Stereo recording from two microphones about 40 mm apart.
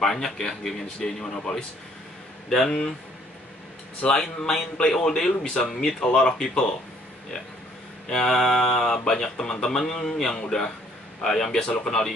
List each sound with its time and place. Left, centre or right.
0.0 s speech: centre
4.1 s speech: centre
8.1 s speech: centre